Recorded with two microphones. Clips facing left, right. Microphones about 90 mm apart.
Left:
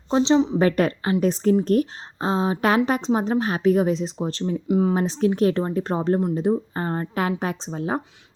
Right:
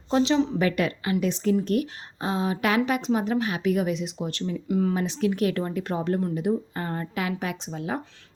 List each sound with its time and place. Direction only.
0.1 s a woman's voice: 25° left (ahead or behind)
0.6 s a woman's voice: 40° left (ahead or behind)
4.9 s a woman's voice: 35° left (ahead or behind)